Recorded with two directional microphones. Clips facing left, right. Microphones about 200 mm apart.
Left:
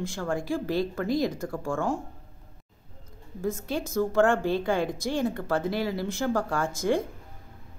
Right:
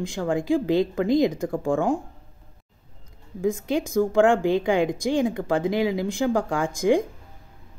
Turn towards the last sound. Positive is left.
turn(degrees=-15)  # may be behind; listen again after turning